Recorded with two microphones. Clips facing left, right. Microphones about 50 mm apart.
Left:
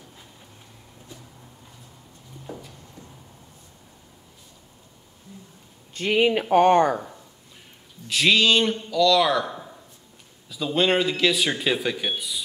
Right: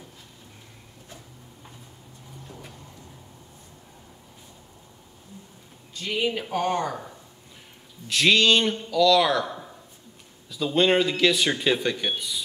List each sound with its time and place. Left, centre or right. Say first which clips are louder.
2.5 s a sound: left 8 dB; centre
5.9 s speech: left 6 dB; left
8.1 s speech: even; centre